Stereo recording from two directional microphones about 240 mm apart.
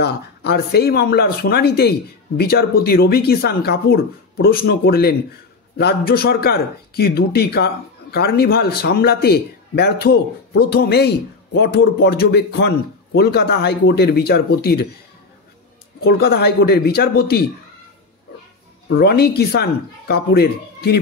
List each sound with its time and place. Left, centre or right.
0.0 s speech: left
16.0 s speech: left
18.9 s speech: left